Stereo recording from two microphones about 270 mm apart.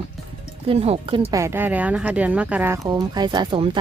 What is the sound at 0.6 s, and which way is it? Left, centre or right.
Speech, right.